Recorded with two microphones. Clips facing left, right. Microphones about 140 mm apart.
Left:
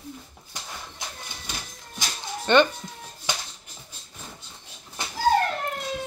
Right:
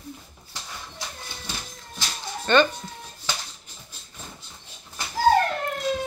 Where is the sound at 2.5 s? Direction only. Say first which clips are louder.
Left 1 dB; 20° left (ahead or behind).